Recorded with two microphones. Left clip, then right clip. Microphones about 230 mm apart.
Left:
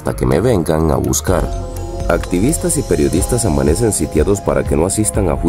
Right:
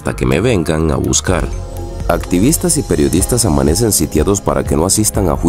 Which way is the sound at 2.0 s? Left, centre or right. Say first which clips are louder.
Right 2 dB; right.